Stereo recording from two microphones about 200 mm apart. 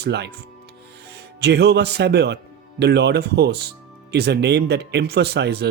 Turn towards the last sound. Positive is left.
turn(degrees=-55)  # may be behind; listen again after turning